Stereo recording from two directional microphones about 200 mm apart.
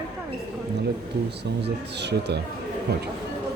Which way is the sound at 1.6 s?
55° right (ahead or behind).